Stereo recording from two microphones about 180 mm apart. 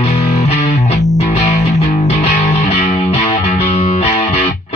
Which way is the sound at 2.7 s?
35° left (ahead or behind).